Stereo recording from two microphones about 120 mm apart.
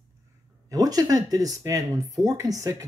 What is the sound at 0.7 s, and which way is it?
Speech, 30° right (ahead or behind).